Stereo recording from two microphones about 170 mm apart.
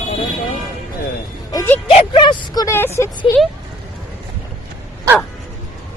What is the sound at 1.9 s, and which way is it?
Speech, 30° left (ahead or behind).